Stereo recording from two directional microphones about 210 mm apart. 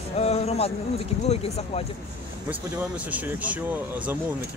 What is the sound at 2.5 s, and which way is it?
Speech, 5° right (ahead or behind).